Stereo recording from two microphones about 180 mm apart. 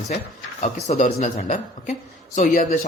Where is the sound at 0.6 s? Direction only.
40° left (ahead or behind).